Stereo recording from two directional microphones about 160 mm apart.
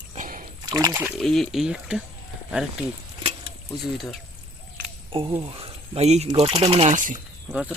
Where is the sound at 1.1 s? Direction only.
Centre (ahead or behind).